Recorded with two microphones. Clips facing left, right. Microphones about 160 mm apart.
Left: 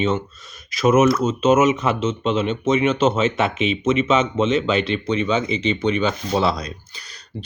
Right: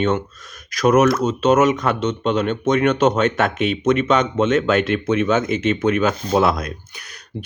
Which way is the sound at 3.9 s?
Centre (ahead or behind).